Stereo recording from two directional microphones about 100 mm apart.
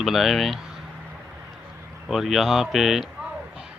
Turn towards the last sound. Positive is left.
turn(degrees=0)  # may be behind; listen again after turning